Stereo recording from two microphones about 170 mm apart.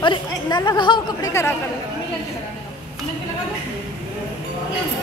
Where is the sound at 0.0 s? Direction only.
25° left (ahead or behind).